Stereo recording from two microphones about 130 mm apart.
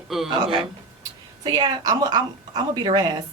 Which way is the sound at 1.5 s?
30° right (ahead or behind).